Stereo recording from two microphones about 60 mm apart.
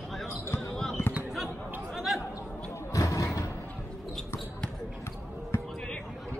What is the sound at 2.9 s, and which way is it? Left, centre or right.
Basketball bounce, left.